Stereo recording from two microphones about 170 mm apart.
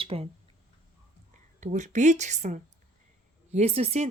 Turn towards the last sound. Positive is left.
turn(degrees=-40)  # may be behind; listen again after turning